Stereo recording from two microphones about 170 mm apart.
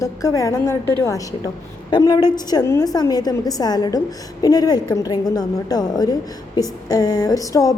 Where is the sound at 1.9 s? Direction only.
25° left (ahead or behind).